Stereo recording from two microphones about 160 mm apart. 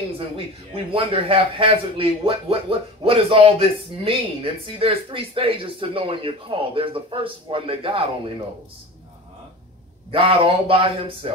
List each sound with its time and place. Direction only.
0.9 s speech: 35° right (ahead or behind)
10.1 s speech: 35° right (ahead or behind)